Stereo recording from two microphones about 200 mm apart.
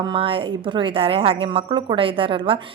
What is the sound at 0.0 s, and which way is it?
A woman's voice, 25° right (ahead or behind).